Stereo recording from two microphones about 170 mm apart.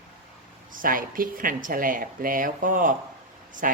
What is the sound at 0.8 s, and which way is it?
Speech, 55° right (ahead or behind).